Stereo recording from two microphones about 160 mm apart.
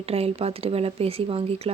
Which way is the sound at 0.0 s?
40° right (ahead or behind).